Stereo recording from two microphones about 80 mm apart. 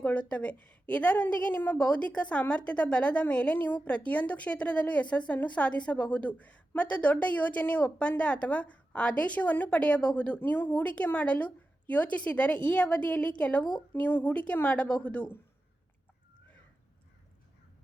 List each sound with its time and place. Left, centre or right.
0.0 s a woman's voice: centre